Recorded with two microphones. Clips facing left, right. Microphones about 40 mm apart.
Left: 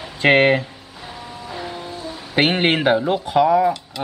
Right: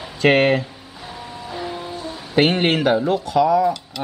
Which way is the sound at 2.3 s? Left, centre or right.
Centre.